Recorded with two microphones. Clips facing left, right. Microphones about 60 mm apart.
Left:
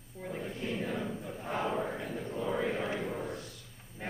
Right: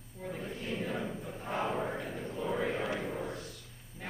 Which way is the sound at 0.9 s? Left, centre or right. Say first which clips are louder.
Left 1 dB; centre.